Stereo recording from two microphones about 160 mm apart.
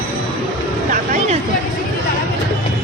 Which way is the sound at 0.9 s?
50° right (ahead or behind).